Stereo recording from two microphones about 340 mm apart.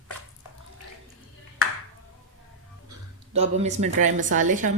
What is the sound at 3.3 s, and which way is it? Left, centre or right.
A woman's voice, centre.